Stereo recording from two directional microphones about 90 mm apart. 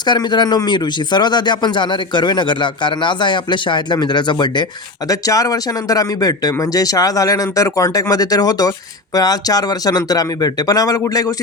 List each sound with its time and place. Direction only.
0.0 s speech: 50° left (ahead or behind)